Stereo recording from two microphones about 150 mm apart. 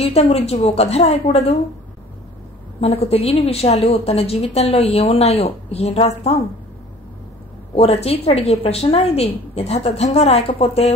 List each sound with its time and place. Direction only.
0.0 s a woman's voice: 45° left (ahead or behind)
2.8 s a woman's voice: 40° left (ahead or behind)
7.7 s a woman's voice: 45° left (ahead or behind)